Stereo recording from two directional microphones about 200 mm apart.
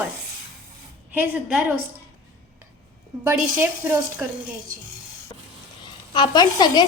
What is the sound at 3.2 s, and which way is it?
A woman's voice, 10° right (ahead or behind).